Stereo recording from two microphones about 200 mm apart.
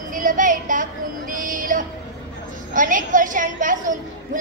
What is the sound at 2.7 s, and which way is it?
A woman's voice, 40° right (ahead or behind).